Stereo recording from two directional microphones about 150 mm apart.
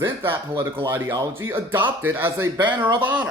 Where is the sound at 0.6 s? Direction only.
20° right (ahead or behind).